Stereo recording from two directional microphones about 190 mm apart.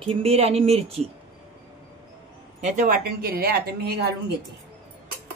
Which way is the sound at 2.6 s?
40° right (ahead or behind).